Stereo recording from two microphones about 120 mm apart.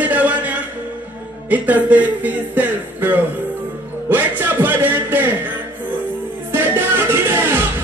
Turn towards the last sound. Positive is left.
turn(degrees=-15)  # may be behind; listen again after turning